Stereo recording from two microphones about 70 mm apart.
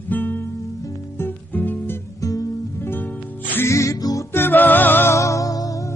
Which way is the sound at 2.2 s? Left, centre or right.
Left.